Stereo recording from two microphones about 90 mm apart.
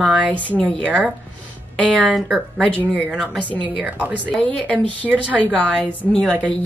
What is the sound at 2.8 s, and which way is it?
Speech, 15° right (ahead or behind).